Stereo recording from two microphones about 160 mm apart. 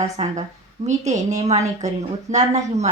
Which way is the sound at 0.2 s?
40° right (ahead or behind).